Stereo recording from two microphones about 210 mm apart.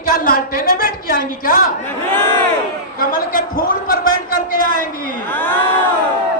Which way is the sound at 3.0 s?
40° left (ahead or behind).